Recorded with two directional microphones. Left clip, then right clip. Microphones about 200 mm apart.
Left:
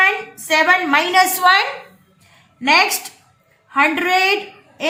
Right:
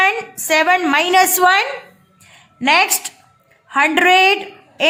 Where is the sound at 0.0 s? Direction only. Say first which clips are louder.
Even; 40° right (ahead or behind).